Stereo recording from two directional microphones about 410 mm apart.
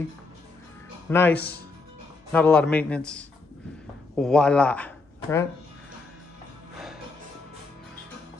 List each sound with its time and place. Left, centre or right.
1.1 s a man's voice: centre